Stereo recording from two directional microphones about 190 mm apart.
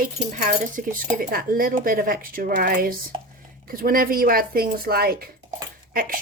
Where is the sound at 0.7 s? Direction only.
50° right (ahead or behind).